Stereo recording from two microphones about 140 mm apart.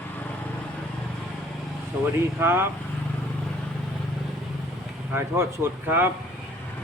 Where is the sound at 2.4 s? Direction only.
15° right (ahead or behind).